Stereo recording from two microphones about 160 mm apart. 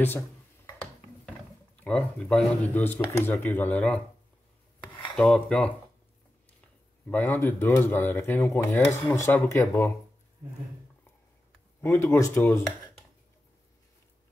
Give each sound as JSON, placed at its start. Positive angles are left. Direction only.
{"t": 1.8, "sound": "speech", "side_deg": 5}
{"t": 4.7, "sound": "filing", "side_deg": 30}
{"t": 5.1, "sound": "cutlery", "side_deg": 5}
{"t": 7.1, "sound": "speech", "side_deg": 10}
{"t": 11.8, "sound": "speech", "side_deg": 15}